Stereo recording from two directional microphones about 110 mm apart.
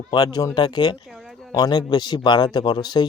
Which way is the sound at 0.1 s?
35° left (ahead or behind).